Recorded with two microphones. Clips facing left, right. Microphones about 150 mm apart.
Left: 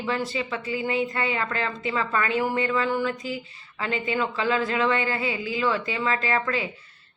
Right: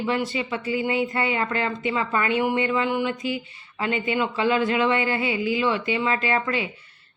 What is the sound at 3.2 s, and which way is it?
Speech, 30° left (ahead or behind).